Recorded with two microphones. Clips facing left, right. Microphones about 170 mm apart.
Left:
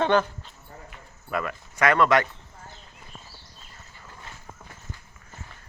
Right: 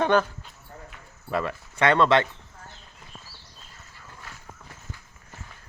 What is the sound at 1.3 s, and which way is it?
Speech, 30° right (ahead or behind).